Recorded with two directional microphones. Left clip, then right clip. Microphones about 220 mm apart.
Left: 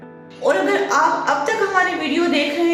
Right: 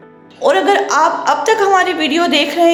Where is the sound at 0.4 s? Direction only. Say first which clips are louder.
Right 5 dB; 40° right (ahead or behind).